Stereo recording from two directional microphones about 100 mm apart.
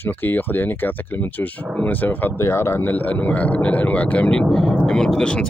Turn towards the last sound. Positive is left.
turn(degrees=10)  # may be behind; listen again after turning